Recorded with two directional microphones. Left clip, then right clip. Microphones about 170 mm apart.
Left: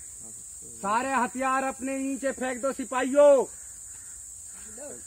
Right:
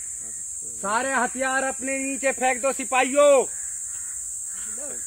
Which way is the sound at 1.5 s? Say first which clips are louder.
Right 2 dB; 30° left (ahead or behind).